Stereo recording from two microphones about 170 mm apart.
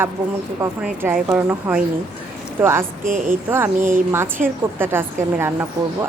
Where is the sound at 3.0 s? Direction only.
50° right (ahead or behind).